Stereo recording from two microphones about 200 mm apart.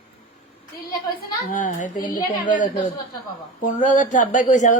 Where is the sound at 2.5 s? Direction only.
40° left (ahead or behind).